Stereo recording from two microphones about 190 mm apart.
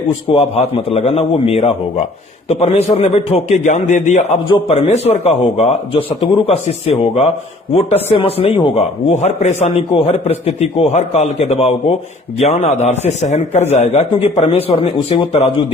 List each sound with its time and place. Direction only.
0.3 s a man's voice: 30° left (ahead or behind)